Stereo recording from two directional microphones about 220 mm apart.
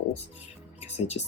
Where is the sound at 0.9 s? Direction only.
30° left (ahead or behind).